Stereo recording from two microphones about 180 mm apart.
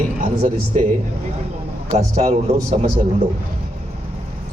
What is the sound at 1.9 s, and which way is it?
Speech, 40° right (ahead or behind).